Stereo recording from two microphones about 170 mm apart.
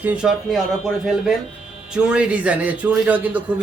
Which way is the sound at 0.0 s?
5° right (ahead or behind).